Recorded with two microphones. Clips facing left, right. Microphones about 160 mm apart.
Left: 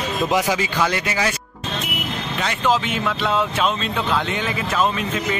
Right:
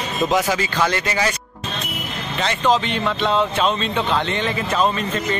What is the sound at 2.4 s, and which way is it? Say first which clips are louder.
Speech: right 2 dB; 5° left (ahead or behind).